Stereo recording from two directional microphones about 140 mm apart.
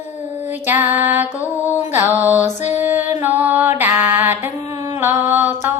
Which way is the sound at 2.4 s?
55° left (ahead or behind).